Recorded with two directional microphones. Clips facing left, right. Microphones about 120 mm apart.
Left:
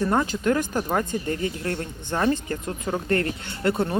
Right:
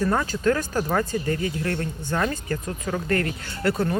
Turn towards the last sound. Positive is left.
turn(degrees=25)  # may be behind; listen again after turning